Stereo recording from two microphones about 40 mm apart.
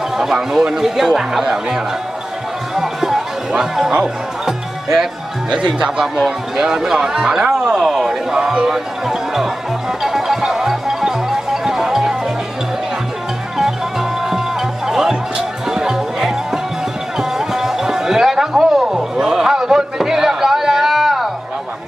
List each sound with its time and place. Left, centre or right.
0.2 s speech: centre
2.7 s run: centre
3.6 s speech: centre
4.0 s music: centre
5.5 s speech: centre
6.1 s speech: centre
7.5 s a sound: centre
10.0 s music: centre
14.2 s music: centre